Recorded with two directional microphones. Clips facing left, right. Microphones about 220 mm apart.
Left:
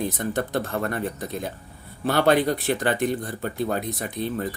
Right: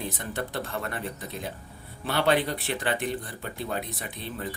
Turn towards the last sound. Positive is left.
turn(degrees=45)  # may be behind; listen again after turning